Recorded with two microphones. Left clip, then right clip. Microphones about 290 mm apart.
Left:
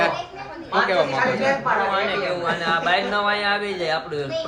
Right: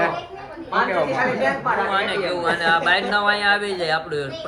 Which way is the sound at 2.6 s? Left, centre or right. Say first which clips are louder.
Right 2 dB; centre.